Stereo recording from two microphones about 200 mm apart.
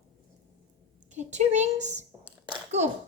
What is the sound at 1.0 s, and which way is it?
A woman's voice, 35° right (ahead or behind).